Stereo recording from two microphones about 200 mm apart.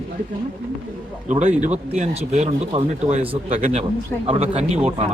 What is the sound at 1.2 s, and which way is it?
Speech, 35° right (ahead or behind).